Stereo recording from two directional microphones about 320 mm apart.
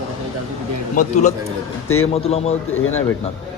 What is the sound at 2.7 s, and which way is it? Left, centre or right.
Speech, left.